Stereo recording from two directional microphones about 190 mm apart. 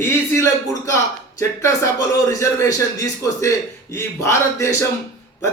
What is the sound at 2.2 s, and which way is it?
A man's voice, 15° left (ahead or behind).